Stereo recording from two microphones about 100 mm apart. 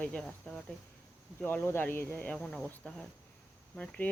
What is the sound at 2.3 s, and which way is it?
Cricket, 5° left (ahead or behind).